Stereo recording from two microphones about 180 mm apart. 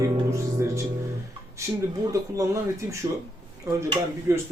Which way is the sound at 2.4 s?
15° right (ahead or behind).